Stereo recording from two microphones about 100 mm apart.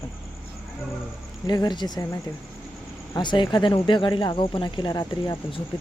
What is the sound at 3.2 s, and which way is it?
Speech, 50° left (ahead or behind).